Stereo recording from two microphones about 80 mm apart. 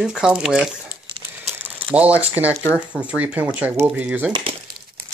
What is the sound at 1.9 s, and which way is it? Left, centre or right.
Speech, centre.